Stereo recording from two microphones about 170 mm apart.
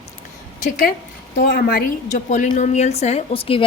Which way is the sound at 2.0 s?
45° left (ahead or behind).